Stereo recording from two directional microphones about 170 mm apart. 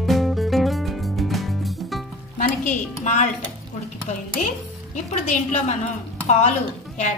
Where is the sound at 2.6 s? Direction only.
45° left (ahead or behind).